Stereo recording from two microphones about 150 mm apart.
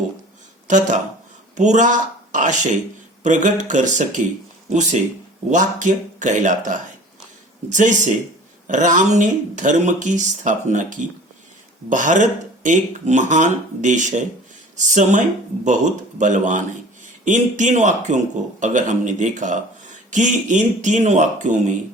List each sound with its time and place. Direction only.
0.7 s speech: 55° right (ahead or behind)
7.7 s speech: 55° right (ahead or behind)
11.9 s speech: 55° right (ahead or behind)